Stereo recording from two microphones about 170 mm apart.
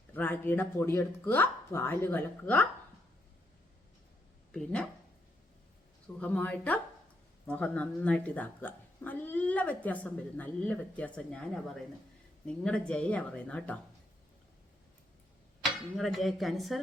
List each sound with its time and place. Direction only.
0.1 s a woman's voice: 10° left (ahead or behind)
4.5 s a woman's voice: 5° left (ahead or behind)
6.1 s a woman's voice: 10° left (ahead or behind)
16.0 s a woman's voice: centre (ahead or behind)